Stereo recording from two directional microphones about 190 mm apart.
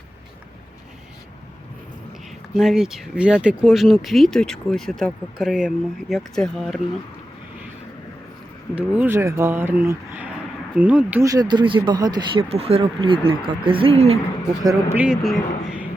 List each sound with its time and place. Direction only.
2.5 s speech: centre (ahead or behind)
8.7 s speech: 5° right (ahead or behind); by 14.2 s 30° right (ahead or behind)
14.6 s speech: 15° right (ahead or behind)